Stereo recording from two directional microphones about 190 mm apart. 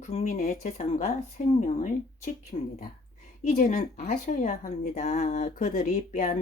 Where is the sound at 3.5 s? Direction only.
45° left (ahead or behind).